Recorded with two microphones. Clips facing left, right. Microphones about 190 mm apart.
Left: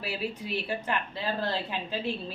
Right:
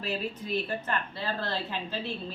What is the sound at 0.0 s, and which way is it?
A woman's voice, 10° left (ahead or behind).